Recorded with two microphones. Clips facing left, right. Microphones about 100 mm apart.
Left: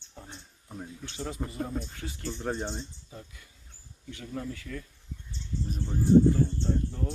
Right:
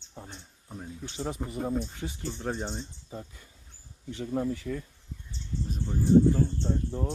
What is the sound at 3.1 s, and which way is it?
Speech, 30° right (ahead or behind).